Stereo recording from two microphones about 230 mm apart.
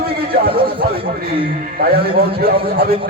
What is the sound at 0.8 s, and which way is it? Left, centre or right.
Speech, right.